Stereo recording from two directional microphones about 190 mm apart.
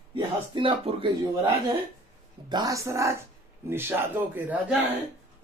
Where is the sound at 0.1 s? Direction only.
25° right (ahead or behind).